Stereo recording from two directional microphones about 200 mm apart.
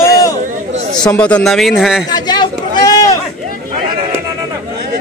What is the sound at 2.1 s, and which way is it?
Sheep, 20° left (ahead or behind).